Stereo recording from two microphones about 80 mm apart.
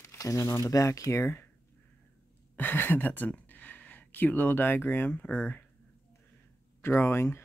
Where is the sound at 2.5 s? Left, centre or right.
Left.